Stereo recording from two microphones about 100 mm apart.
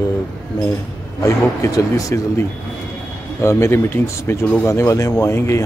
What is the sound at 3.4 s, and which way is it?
Speech, 25° left (ahead or behind).